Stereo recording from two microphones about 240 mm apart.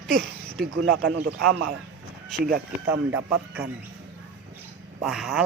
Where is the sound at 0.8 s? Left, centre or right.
Right.